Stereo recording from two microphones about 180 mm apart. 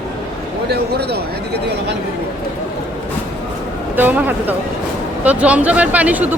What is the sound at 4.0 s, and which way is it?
Speech, 10° right (ahead or behind).